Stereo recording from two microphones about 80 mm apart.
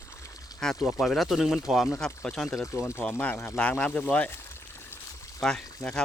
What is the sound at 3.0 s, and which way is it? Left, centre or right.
Speech, centre.